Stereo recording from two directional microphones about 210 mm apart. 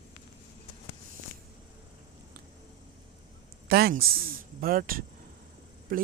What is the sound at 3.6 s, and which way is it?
Speech, 45° right (ahead or behind).